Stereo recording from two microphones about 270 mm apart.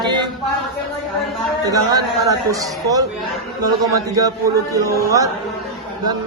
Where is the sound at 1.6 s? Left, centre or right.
Centre.